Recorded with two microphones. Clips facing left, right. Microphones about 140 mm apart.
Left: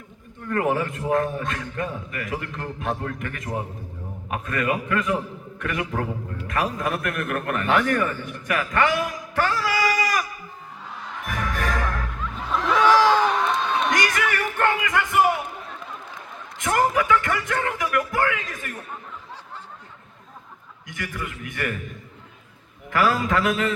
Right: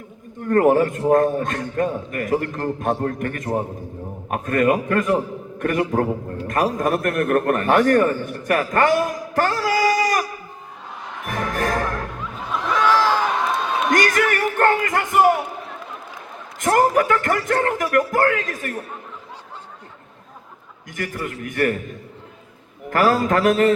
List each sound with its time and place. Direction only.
0.4 s a man's voice: 45° right (ahead or behind)
11.3 s music: 45° right (ahead or behind)
12.7 s a sound: 15° left (ahead or behind)
13.9 s a sound: 45° right (ahead or behind)
16.6 s a man's voice: 40° right (ahead or behind)
20.8 s a man's voice: 45° right (ahead or behind)
22.9 s a man's voice: 45° right (ahead or behind)